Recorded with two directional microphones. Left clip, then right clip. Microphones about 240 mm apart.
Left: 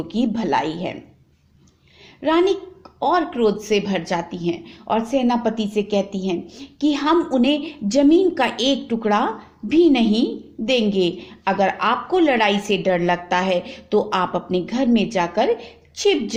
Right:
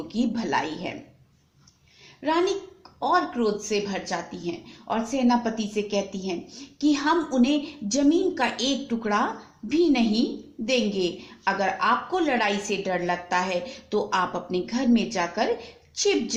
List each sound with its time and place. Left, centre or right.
0.1 s a woman's voice: left
2.2 s a woman's voice: left